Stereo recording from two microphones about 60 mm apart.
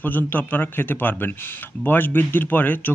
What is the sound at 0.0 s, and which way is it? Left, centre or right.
A man's voice, left.